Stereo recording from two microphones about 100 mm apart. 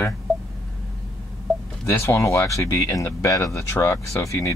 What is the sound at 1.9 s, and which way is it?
Speech, 25° left (ahead or behind).